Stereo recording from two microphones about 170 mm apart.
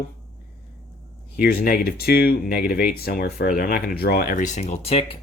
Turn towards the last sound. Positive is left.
turn(degrees=35)  # may be behind; listen again after turning